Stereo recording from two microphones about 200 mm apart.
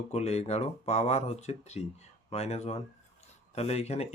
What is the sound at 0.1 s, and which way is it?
Speech, 30° left (ahead or behind).